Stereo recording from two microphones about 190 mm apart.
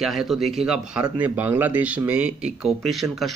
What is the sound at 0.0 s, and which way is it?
Speech, centre (ahead or behind).